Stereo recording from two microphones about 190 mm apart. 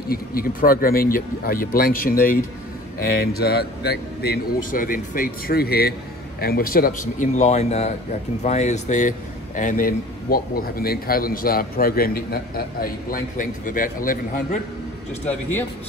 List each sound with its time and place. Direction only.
0.1 s a man's voice: 50° left (ahead or behind)